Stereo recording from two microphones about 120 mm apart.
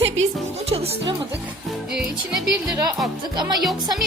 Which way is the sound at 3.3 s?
35° right (ahead or behind).